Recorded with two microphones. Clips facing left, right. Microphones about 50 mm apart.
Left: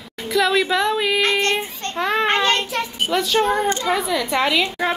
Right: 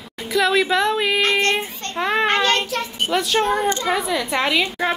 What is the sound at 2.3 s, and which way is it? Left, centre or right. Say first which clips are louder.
Child singing: even; left.